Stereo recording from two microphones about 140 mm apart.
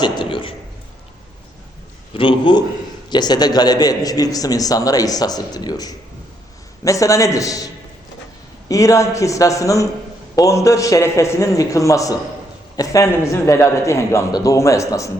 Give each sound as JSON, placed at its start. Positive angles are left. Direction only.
{"t": 0.0, "sound": "a sound", "side_deg": 35}
{"t": 2.1, "sound": "a man's voice", "side_deg": 35}
{"t": 8.7, "sound": "a man's voice", "side_deg": 25}